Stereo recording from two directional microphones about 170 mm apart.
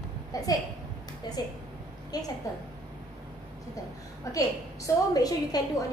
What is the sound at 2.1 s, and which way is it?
Speech, 25° left (ahead or behind).